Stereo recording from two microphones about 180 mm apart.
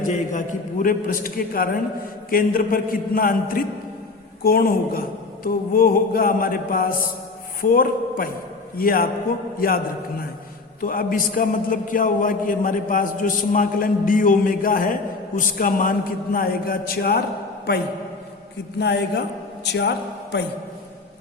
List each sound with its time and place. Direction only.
0.0 s a man's voice: 45° left (ahead or behind)
18.8 s a man's voice: 70° left (ahead or behind)